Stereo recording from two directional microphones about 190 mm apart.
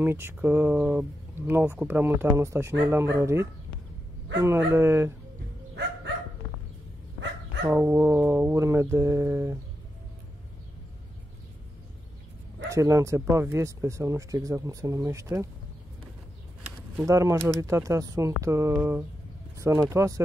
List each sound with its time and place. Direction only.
0.0 s speech: 10° right (ahead or behind)
7.6 s speech: 15° right (ahead or behind)
12.6 s speech: 15° right (ahead or behind)
17.0 s speech: 15° right (ahead or behind)